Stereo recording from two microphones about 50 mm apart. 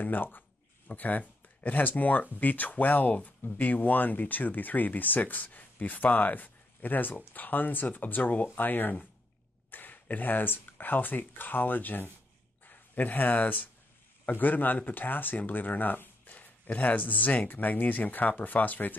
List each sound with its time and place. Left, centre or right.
0.0 s speech: left